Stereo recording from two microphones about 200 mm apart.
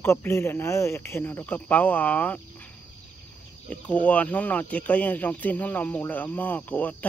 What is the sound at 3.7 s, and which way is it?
Speech, 5° left (ahead or behind).